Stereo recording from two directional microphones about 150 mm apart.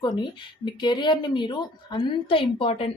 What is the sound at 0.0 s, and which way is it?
Speech, 30° left (ahead or behind).